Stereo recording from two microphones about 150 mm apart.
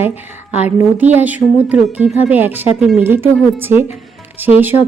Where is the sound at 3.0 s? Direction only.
15° right (ahead or behind).